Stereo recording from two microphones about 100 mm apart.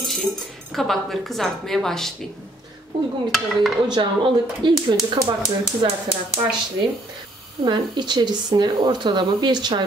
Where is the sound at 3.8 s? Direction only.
45° right (ahead or behind).